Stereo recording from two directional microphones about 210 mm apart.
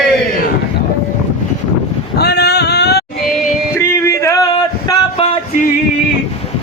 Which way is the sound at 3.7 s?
15° left (ahead or behind).